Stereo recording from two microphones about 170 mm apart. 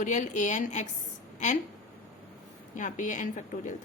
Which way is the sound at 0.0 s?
45° left (ahead or behind).